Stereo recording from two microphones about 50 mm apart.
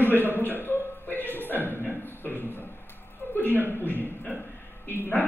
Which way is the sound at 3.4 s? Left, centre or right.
Left.